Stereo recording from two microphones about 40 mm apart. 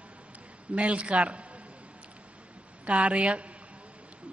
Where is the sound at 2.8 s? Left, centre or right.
Right.